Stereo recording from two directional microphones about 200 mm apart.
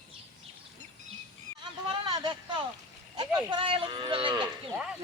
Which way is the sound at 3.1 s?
20° right (ahead or behind).